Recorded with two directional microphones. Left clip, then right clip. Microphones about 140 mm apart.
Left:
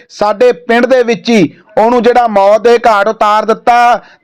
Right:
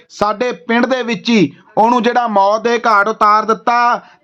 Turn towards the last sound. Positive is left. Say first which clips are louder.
# left 6 dB
turn(degrees=30)  # may be behind; listen again after turning